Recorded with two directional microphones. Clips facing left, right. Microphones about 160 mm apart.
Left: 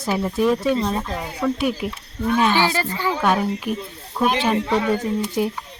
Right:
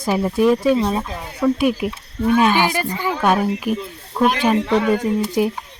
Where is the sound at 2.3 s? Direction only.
15° right (ahead or behind).